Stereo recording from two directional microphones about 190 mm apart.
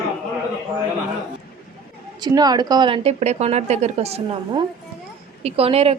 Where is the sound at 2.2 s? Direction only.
20° right (ahead or behind).